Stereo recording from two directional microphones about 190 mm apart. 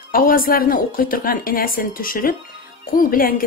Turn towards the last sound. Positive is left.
turn(degrees=50)  # may be behind; listen again after turning